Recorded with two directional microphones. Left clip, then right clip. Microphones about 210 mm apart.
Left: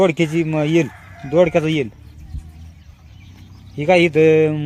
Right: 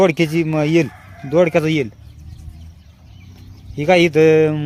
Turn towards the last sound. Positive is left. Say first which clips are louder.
# right 1 dB
turn(degrees=0)  # may be behind; listen again after turning